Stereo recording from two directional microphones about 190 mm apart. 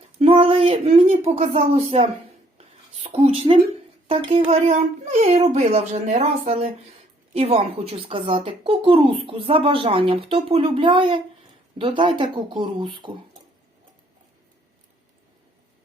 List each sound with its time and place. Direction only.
0.2 s speech: 30° right (ahead or behind)
2.6 s a sound: 35° right (ahead or behind)
4.0 s speech: 35° right (ahead or behind)